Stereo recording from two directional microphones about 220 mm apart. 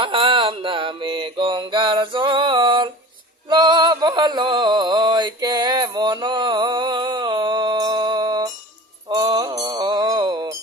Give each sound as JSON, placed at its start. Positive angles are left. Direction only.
{"t": 0.0, "sound": "mantra", "side_deg": -25}
{"t": 3.5, "sound": "a sound", "side_deg": -20}
{"t": 9.0, "sound": "music", "side_deg": -20}